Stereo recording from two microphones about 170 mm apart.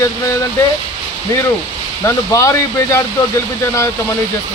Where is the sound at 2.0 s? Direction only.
15° left (ahead or behind).